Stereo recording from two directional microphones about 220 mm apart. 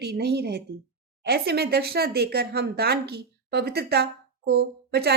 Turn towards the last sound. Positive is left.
turn(degrees=-45)  # may be behind; listen again after turning